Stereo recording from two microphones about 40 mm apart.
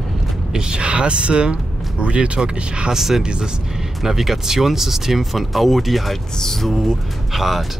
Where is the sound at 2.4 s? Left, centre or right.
Centre.